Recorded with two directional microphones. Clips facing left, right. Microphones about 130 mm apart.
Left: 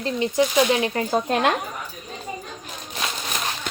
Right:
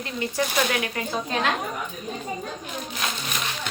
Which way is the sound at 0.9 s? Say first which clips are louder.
Left 6 dB; 40° left (ahead or behind).